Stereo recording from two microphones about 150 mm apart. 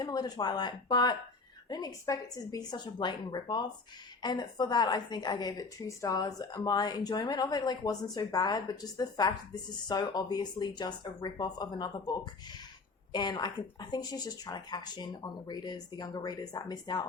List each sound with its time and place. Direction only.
0.0 s a woman's voice: 25° left (ahead or behind)